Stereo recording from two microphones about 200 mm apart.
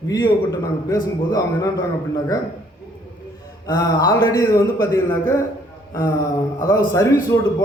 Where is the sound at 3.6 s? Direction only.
20° left (ahead or behind).